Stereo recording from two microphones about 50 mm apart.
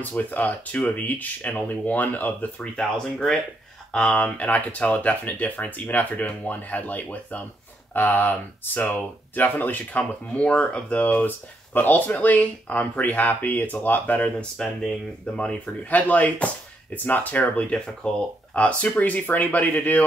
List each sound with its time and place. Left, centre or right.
0.0 s speech: left
4.1 s speech: left
11.0 s speech: left
14.6 s speech: centre
15.3 s speech: centre
15.9 s speech: left
17.6 s speech: left